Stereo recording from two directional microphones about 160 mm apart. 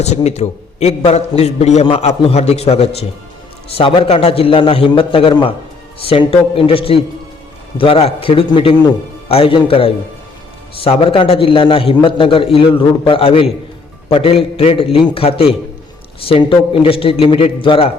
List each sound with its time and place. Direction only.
0.0 s a man's voice: 45° left (ahead or behind)